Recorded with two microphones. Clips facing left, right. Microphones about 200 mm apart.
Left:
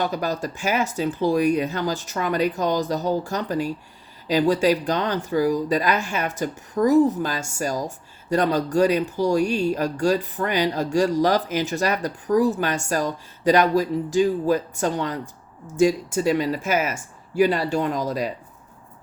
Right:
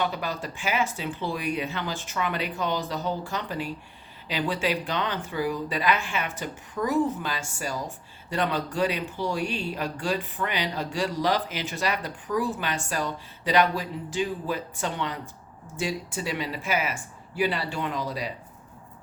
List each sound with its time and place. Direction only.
0.0 s speech: 40° left (ahead or behind)